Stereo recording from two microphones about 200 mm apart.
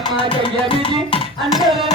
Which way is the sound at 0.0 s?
25° left (ahead or behind).